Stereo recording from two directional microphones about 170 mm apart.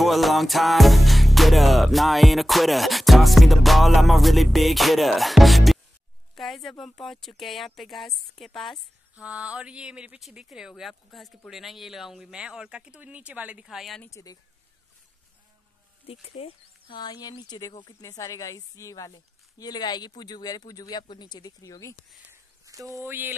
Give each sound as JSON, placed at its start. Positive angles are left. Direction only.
{"t": 0.0, "sound": "speech", "side_deg": 0}
{"t": 14.1, "sound": "speech", "side_deg": 20}
{"t": 16.1, "sound": "speech", "side_deg": 35}
{"t": 22.3, "sound": "speech", "side_deg": -20}